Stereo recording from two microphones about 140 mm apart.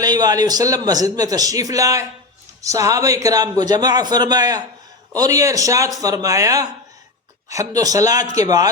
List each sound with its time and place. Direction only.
0.0 s a man's voice: 30° right (ahead or behind)